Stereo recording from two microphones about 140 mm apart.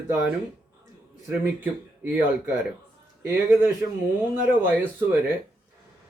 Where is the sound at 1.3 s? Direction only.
10° right (ahead or behind).